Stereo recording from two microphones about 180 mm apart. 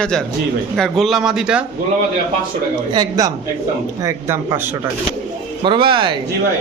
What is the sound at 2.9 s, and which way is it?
Speech, 20° right (ahead or behind).